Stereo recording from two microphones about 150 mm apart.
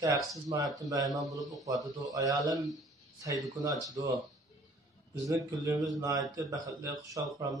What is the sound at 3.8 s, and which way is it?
Speech, 25° right (ahead or behind).